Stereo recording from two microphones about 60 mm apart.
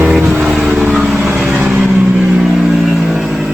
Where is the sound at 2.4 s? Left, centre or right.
Centre.